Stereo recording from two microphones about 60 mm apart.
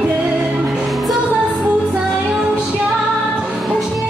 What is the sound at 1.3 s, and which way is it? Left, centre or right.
Music, right.